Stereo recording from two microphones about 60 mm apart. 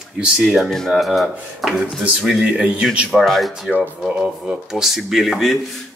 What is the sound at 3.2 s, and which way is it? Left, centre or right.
Speech, centre.